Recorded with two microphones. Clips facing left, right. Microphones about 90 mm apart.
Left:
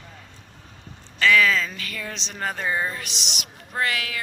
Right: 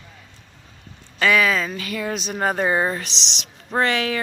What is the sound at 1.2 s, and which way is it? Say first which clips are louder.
Speech: right 1 dB; 20° right (ahead or behind).